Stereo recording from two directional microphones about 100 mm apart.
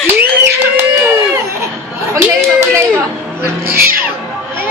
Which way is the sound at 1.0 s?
25° right (ahead or behind).